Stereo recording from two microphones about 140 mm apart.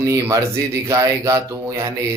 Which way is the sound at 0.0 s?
20° right (ahead or behind).